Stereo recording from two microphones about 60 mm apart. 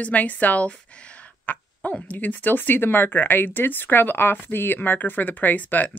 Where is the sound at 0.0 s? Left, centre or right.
Left.